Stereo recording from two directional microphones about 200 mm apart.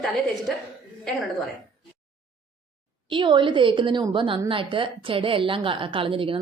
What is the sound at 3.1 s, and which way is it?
A woman's voice, 25° right (ahead or behind).